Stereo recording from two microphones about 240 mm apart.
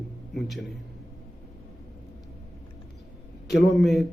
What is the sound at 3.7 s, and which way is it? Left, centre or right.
Speech, centre.